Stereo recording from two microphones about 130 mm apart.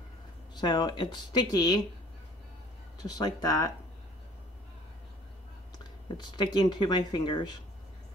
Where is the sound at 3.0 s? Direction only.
30° left (ahead or behind).